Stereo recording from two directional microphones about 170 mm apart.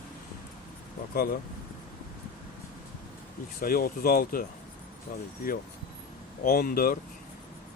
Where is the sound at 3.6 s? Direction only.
55° left (ahead or behind).